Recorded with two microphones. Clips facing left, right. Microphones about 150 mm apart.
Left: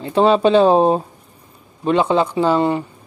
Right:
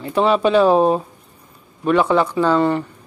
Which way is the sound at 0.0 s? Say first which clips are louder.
Left 2 dB; 25° left (ahead or behind).